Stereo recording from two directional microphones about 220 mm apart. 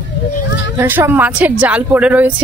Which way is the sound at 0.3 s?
50° left (ahead or behind).